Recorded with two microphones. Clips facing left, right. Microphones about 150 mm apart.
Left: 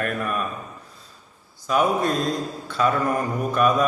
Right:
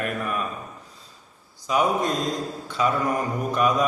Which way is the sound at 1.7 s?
20° right (ahead or behind).